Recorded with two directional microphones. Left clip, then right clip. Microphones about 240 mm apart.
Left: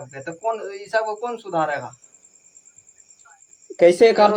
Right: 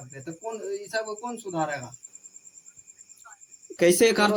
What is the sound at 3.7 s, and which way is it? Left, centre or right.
Speech, right.